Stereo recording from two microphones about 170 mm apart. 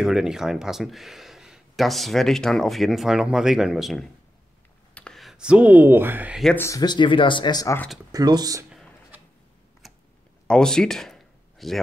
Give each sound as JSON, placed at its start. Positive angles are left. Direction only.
{"t": 0.0, "sound": "speech", "side_deg": -5}
{"t": 6.4, "sound": "speech", "side_deg": 15}
{"t": 8.1, "sound": "speech", "side_deg": -25}
{"t": 8.6, "sound": "a sound", "side_deg": 0}